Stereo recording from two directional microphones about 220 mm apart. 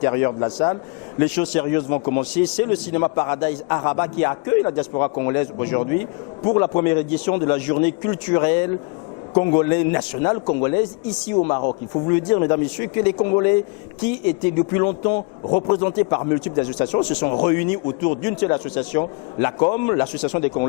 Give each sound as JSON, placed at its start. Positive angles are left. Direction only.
{"t": 0.0, "sound": "a man's voice", "side_deg": 15}
{"t": 11.3, "sound": "a man's voice", "side_deg": 30}
{"t": 12.0, "sound": "a man's voice", "side_deg": 15}